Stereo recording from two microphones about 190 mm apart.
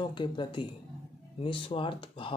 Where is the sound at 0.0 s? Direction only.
25° left (ahead or behind).